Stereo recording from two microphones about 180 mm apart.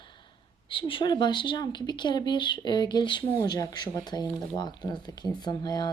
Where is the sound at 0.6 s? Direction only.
30° left (ahead or behind).